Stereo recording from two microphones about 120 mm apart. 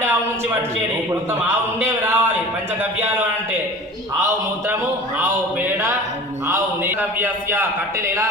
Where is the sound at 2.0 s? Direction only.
20° right (ahead or behind).